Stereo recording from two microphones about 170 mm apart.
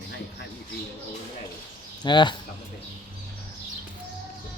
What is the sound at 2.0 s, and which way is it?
Speech, 25° left (ahead or behind).